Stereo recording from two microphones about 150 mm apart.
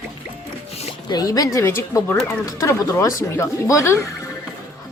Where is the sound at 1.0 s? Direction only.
25° left (ahead or behind).